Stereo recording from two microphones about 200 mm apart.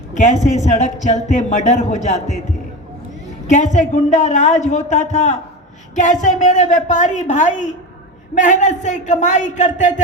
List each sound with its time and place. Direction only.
0.1 s a man's voice: 35° left (ahead or behind)
3.4 s a man's voice: 35° left (ahead or behind)